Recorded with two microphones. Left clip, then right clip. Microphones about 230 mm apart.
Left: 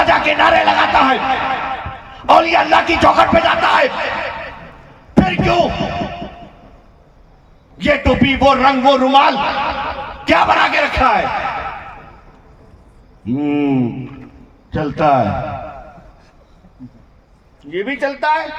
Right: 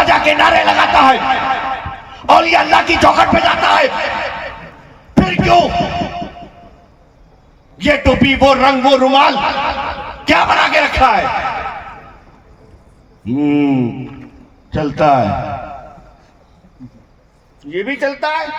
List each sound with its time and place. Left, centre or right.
0.0 s a man's voice: right
7.8 s a man's voice: right
13.2 s a man's voice: right
17.7 s speech: centre